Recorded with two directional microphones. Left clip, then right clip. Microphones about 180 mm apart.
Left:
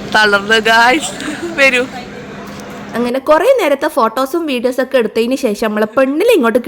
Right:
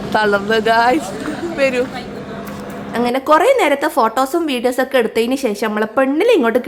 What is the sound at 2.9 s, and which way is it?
A woman's voice, 15° left (ahead or behind).